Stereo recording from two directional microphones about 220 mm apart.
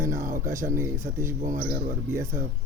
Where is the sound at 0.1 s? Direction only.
40° right (ahead or behind).